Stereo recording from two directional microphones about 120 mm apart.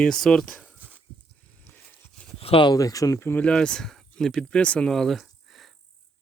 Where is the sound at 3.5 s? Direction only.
5° left (ahead or behind).